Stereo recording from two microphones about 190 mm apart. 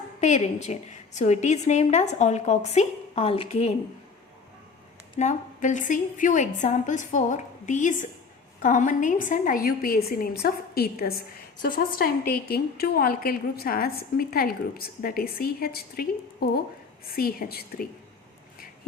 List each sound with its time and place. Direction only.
0.2 s a woman's voice: 40° left (ahead or behind)
5.2 s a woman's voice: 40° left (ahead or behind)